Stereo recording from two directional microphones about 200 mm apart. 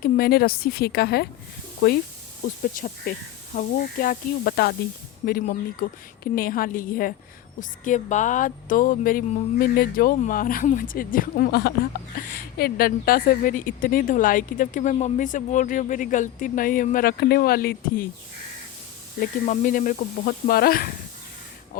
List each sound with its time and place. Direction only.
0.0 s a woman's voice: 50° left (ahead or behind)
2.8 s a woman's voice: 40° left (ahead or behind)
19.2 s a woman's voice: 40° left (ahead or behind)